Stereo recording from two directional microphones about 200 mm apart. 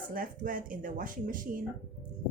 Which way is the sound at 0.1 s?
45° right (ahead or behind).